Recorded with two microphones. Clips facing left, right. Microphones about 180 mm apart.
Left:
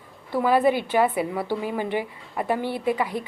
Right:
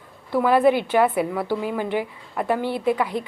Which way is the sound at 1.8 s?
55° right (ahead or behind).